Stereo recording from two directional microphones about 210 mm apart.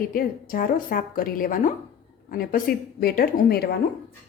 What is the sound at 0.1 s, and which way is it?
A woman's voice, 45° left (ahead or behind).